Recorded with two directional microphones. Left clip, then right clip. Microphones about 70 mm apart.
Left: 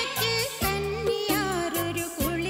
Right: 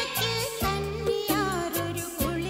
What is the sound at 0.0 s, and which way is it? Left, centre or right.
Music, right.